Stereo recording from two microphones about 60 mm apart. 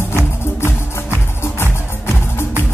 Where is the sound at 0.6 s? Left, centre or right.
Left.